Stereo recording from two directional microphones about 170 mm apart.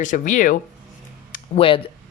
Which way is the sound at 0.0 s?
45° left (ahead or behind).